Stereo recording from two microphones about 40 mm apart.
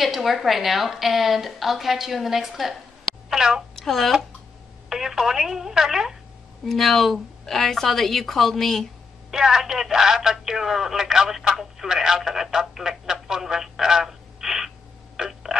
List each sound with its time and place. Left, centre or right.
0.0 s a woman's voice: centre
3.3 s a child's voice: centre
3.7 s a child's voice: centre
4.8 s speech: centre
6.6 s a woman's voice: centre
9.3 s speech: centre
15.1 s a sound: centre